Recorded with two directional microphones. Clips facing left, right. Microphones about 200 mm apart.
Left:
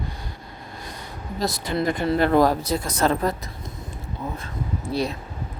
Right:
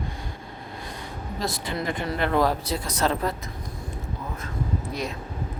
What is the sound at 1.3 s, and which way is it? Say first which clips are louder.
A woman's voice: left 5 dB; 40° left (ahead or behind).